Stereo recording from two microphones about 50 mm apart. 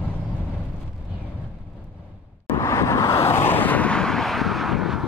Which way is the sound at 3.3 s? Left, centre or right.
Left.